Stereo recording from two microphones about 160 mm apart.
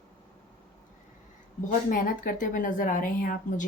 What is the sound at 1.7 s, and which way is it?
A woman's voice, 55° left (ahead or behind).